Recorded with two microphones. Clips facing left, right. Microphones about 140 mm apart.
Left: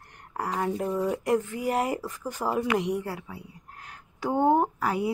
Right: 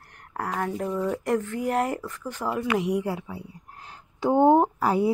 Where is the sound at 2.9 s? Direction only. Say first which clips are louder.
Right 5 dB; 20° right (ahead or behind).